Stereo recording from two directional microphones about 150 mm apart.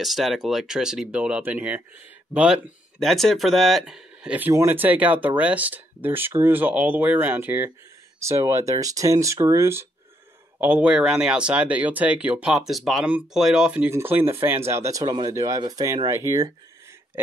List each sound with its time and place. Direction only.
0.0 s speech: centre (ahead or behind); by 16.5 s 20° right (ahead or behind)